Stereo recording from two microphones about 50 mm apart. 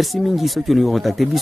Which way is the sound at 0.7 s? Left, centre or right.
Centre.